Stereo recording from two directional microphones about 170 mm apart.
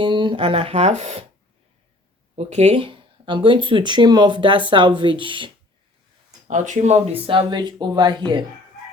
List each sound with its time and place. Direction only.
0.0 s speech: 30° right (ahead or behind)
2.3 s speech: 40° right (ahead or behind)
6.5 s speech: 45° right (ahead or behind); by 8.1 s 25° right (ahead or behind)